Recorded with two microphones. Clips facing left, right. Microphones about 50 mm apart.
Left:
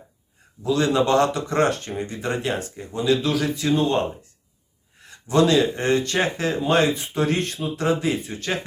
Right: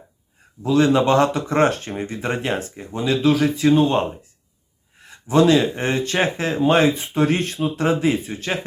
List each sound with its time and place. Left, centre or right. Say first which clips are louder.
0.6 s speech: right 4 dB; right
7.2 s speech: right 4 dB; centre
7.8 s speech: right 2 dB; right